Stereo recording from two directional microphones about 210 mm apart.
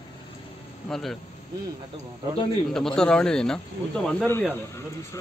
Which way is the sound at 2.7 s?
Centre (ahead or behind).